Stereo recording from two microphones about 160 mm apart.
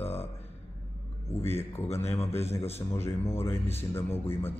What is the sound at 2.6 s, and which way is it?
Speech, 40° left (ahead or behind).